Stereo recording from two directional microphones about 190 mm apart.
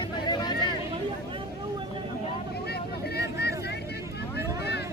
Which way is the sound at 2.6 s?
60° left (ahead or behind).